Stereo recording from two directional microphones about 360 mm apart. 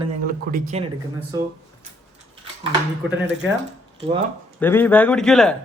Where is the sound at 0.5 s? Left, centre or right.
Right.